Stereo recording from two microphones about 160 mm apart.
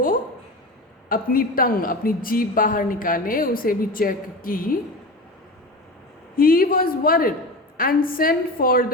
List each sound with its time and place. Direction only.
1.0 s a woman's voice: 60° left (ahead or behind)
6.3 s a woman's voice: 65° left (ahead or behind)